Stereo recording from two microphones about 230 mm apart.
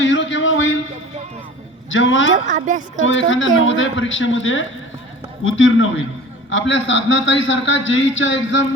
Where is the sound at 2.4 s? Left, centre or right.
Right.